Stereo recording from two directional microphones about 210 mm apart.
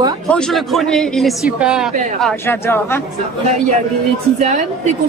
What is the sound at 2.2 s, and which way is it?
Speech, 10° left (ahead or behind).